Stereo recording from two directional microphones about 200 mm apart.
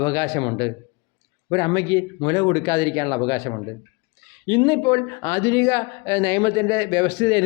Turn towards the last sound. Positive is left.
turn(degrees=20)  # may be behind; listen again after turning